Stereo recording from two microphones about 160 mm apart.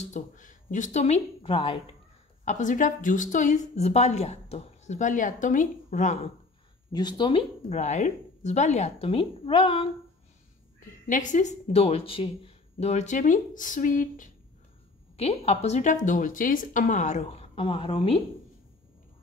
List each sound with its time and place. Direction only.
0.0 s a woman's voice: 50° left (ahead or behind)
1.4 s a woman's voice: 35° left (ahead or behind)
2.4 s a woman's voice: 50° left (ahead or behind)
6.9 s speech: 25° left (ahead or behind)
7.7 s a woman's voice: 45° left (ahead or behind)
11.1 s a woman's voice: 55° left (ahead or behind)
15.1 s a woman's voice: 40° left (ahead or behind)